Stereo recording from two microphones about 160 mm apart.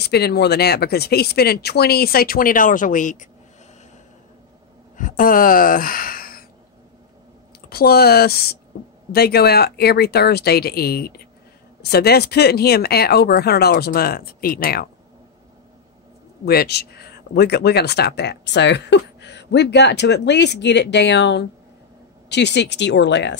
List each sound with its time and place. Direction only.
0.0 s speech: 90° left; by 3.3 s 55° left (ahead or behind)
4.9 s speech: 55° left (ahead or behind)
7.7 s speech: 75° left (ahead or behind)
16.4 s speech: 85° left